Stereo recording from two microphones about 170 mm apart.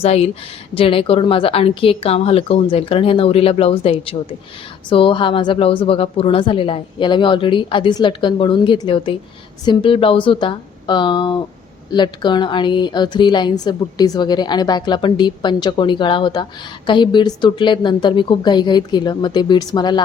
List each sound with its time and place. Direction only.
0.0 s a woman's voice: 35° left (ahead or behind)